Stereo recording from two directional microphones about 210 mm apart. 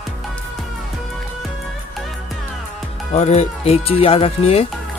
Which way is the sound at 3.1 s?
30° left (ahead or behind).